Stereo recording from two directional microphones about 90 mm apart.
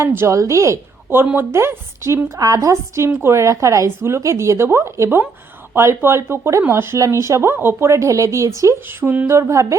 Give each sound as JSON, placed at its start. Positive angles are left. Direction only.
{"t": 0.0, "sound": "a woman's voice", "side_deg": -30}